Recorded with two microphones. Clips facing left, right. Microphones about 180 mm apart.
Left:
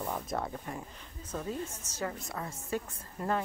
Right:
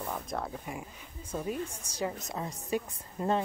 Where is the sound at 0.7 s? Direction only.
10° right (ahead or behind).